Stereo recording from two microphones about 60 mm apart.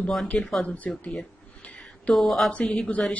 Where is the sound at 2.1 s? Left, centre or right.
Centre.